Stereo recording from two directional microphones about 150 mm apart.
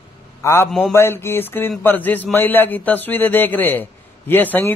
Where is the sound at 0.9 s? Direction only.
15° left (ahead or behind).